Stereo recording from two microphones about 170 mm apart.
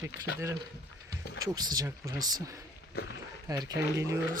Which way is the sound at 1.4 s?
20° right (ahead or behind).